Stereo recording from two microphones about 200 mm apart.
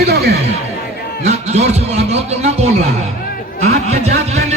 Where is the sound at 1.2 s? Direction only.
35° right (ahead or behind).